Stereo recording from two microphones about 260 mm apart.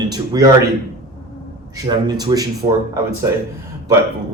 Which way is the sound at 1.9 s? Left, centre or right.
Centre.